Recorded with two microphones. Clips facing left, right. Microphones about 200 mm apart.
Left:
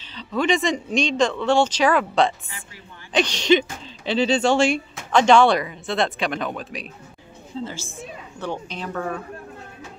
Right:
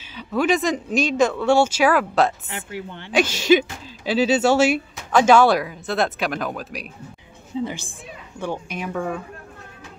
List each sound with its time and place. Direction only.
0.1 s speech: 10° right (ahead or behind)
2.5 s speech: 70° right (ahead or behind)
3.2 s speech: 5° right (ahead or behind)
7.6 s speech: 15° right (ahead or behind)